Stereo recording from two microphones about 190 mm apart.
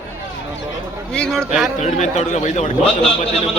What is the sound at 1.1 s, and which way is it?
Speech, 5° left (ahead or behind).